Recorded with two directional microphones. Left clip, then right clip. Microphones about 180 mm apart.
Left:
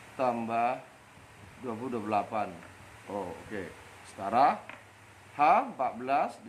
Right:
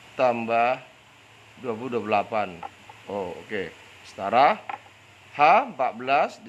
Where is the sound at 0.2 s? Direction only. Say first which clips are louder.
Right 7 dB; 45° right (ahead or behind).